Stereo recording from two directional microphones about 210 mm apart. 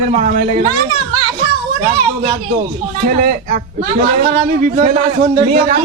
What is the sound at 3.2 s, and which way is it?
Speech, 40° right (ahead or behind).